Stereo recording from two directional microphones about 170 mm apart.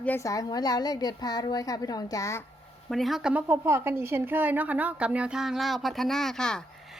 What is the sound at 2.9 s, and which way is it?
A woman's voice, centre (ahead or behind).